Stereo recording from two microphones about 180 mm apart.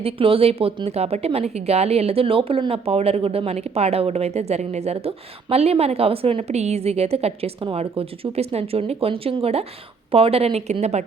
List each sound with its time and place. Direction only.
0.0 s a woman's voice: 30° right (ahead or behind)